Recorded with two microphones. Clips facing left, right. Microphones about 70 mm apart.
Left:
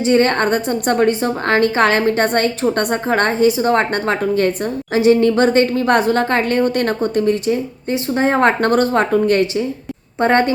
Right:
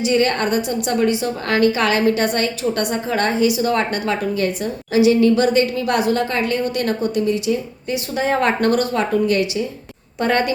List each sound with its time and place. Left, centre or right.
0.0 s a woman's voice: left